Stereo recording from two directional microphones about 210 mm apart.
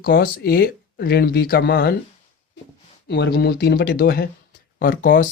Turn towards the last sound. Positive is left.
turn(degrees=40)  # may be behind; listen again after turning